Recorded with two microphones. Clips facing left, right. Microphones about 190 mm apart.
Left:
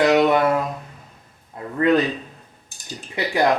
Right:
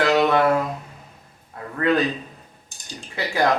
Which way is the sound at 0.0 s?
20° left (ahead or behind).